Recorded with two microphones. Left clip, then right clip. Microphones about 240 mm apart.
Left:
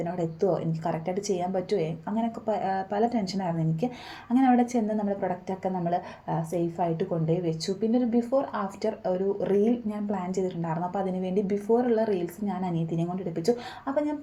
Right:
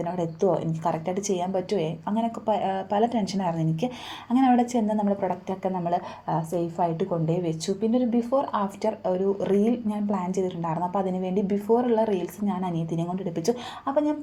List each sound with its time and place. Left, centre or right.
0.0 s a woman's voice: centre